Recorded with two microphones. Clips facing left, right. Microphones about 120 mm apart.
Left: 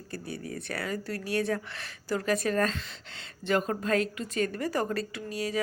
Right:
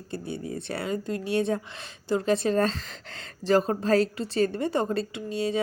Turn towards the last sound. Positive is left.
turn(degrees=-25)  # may be behind; listen again after turning